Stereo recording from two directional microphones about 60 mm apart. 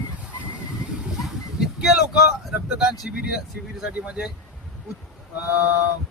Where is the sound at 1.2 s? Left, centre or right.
Centre.